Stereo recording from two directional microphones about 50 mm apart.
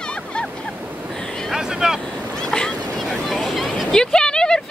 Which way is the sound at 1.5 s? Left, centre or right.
Centre.